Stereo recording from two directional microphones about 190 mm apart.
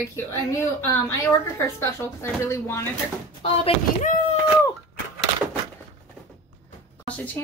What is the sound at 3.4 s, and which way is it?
Speech, 30° left (ahead or behind).